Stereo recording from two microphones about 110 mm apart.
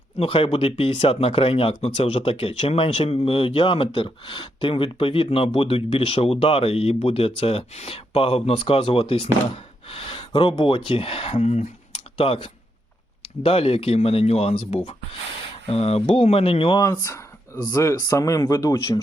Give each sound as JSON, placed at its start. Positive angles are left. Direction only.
{"t": 0.2, "sound": "speech", "side_deg": 60}
{"t": 9.9, "sound": "a sound", "side_deg": 55}
{"t": 10.6, "sound": "speech", "side_deg": 55}
{"t": 12.1, "sound": "speech", "side_deg": 60}
{"t": 16.8, "sound": "speech", "side_deg": 30}